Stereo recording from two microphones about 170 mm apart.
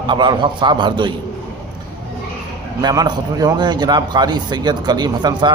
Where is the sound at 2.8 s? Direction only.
20° right (ahead or behind).